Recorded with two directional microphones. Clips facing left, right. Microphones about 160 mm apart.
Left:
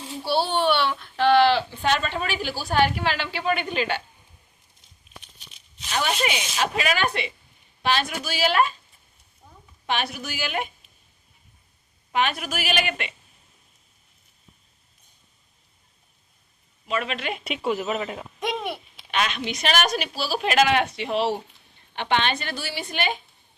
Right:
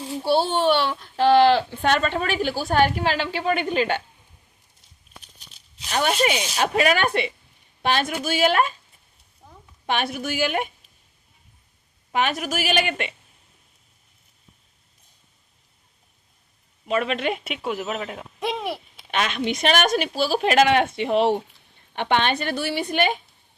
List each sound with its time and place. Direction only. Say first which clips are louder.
0.3 s a child's voice: right 3 dB; 45° right (ahead or behind)
5.9 s a child's voice: right 4 dB; 40° right (ahead or behind)
9.8 s a child's voice: right 3 dB; 50° right (ahead or behind)
12.1 s a child's voice: right 2 dB; 45° right (ahead or behind)
16.9 s a child's voice: right 5 dB; 50° right (ahead or behind)
17.4 s speech: left 2 dB; centre (ahead or behind)
19.1 s a child's voice: right 2 dB; 50° right (ahead or behind)